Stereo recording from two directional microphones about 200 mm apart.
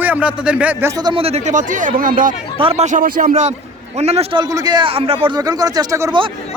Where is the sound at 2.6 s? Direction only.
30° right (ahead or behind).